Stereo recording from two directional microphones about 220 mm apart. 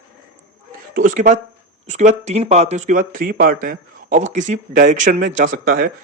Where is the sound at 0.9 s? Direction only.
35° right (ahead or behind).